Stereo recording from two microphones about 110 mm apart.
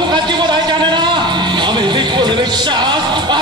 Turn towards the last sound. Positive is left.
turn(degrees=-45)  # may be behind; listen again after turning